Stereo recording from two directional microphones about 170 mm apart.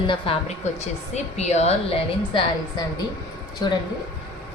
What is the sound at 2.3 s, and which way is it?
Speech, 25° left (ahead or behind).